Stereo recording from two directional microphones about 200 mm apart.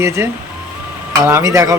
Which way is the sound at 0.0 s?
15° right (ahead or behind).